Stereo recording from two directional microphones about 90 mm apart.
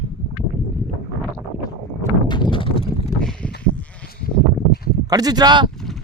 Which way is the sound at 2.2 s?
55° left (ahead or behind).